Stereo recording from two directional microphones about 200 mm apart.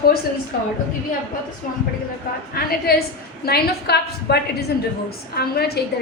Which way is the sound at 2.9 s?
50° left (ahead or behind).